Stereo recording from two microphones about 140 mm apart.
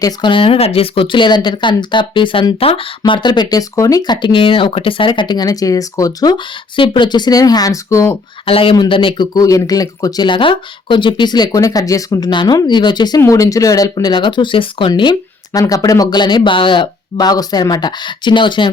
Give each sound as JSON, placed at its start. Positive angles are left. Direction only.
{"t": 0.0, "sound": "speech", "side_deg": 35}
{"t": 8.4, "sound": "speech", "side_deg": 40}
{"t": 15.5, "sound": "speech", "side_deg": 25}